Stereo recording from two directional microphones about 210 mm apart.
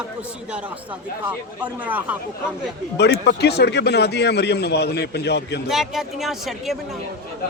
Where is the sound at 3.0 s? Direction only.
55° left (ahead or behind).